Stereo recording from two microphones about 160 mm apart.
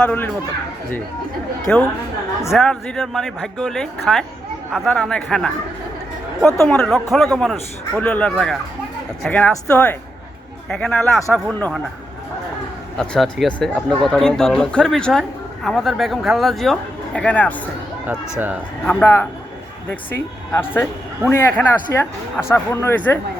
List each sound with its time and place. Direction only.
0.0 s speech: 5° left (ahead or behind)
1.7 s speech: 5° left (ahead or behind)
13.0 s speech: centre (ahead or behind)
18.0 s speech: 10° right (ahead or behind)
18.9 s speech: 10° left (ahead or behind)